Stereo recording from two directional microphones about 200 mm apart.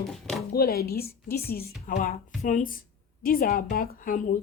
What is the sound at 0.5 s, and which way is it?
A woman's voice, 50° left (ahead or behind).